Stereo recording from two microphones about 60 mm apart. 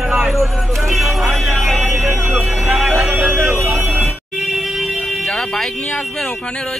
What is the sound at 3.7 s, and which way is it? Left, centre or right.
Music, right.